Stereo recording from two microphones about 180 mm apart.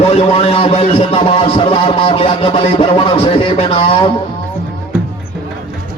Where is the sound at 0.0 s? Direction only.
35° left (ahead or behind).